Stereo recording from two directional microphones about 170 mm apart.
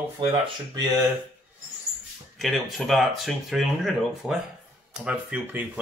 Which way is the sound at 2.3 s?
Centre (ahead or behind).